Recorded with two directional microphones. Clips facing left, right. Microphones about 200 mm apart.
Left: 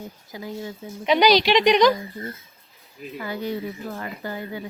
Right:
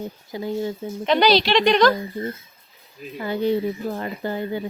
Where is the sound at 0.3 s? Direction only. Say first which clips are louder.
Right 7 dB; 25° right (ahead or behind).